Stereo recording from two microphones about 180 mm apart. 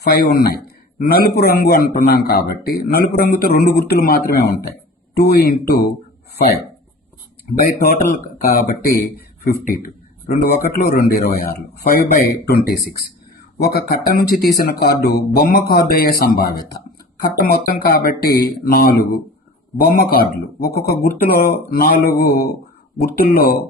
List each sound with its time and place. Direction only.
0.0 s a man's voice: 60° left (ahead or behind)
7.6 s a man's voice: 55° left (ahead or behind)